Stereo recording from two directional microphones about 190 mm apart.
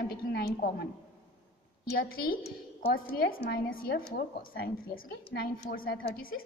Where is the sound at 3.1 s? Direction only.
55° left (ahead or behind).